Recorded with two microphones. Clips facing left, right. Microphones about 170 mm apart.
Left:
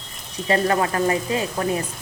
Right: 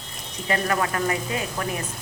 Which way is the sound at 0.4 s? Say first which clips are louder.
Left 4 dB; 30° left (ahead or behind).